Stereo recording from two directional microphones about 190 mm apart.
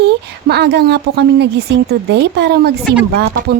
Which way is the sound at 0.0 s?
60° right (ahead or behind).